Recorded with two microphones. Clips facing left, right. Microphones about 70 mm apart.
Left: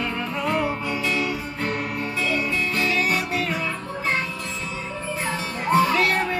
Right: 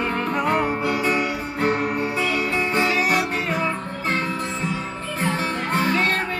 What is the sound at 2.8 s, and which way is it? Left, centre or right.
Music, centre.